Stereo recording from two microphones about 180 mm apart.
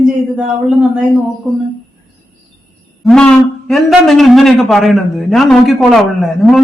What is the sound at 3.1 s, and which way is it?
A man's voice, 5° left (ahead or behind).